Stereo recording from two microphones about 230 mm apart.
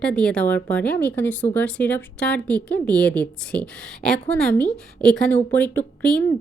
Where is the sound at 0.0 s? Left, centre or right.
Centre.